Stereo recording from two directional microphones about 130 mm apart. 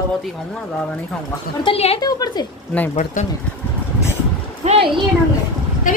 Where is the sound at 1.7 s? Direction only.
50° left (ahead or behind).